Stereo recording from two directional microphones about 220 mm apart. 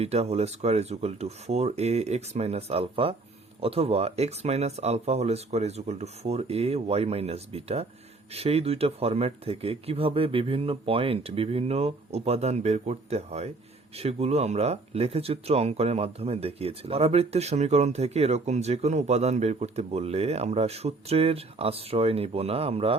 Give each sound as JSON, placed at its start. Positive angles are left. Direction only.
{"t": 0.0, "sound": "speech", "side_deg": -30}